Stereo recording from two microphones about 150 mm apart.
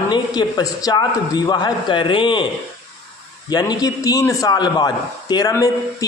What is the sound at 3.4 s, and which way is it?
A man's voice, 25° left (ahead or behind).